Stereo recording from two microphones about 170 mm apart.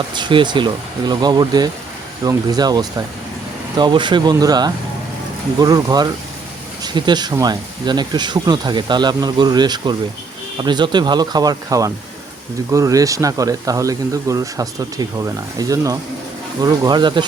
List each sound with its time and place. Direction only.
0.1 s speech: 25° right (ahead or behind)